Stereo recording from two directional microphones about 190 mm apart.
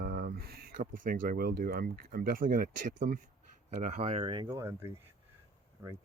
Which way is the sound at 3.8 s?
35° right (ahead or behind).